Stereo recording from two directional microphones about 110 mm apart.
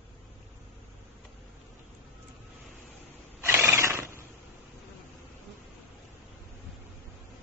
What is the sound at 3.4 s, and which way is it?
Horse, 20° right (ahead or behind).